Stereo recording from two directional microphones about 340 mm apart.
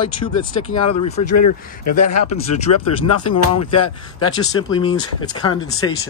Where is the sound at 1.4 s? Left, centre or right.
Left.